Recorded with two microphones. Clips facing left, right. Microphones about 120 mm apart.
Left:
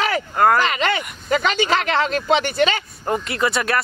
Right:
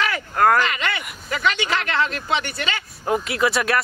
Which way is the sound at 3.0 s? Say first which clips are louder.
Right 1 dB; centre (ahead or behind).